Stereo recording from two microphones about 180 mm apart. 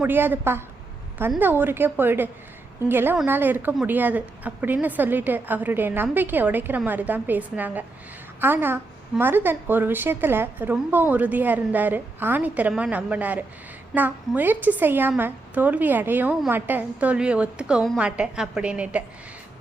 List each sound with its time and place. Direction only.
0.0 s a woman's voice: 10° right (ahead or behind)